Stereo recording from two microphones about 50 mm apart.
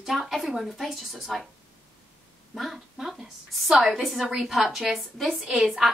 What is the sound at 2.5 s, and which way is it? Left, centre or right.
A woman's voice, centre.